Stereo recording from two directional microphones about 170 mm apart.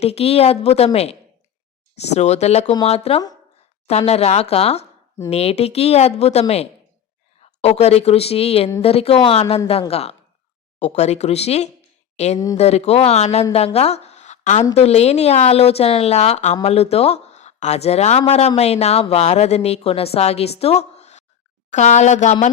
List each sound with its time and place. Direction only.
0.0 s speech: 35° left (ahead or behind)
2.1 s speech: 40° left (ahead or behind)
7.4 s speech: 40° left (ahead or behind)
13.7 s a sound: 40° left (ahead or behind)
14.8 s speech: 40° left (ahead or behind)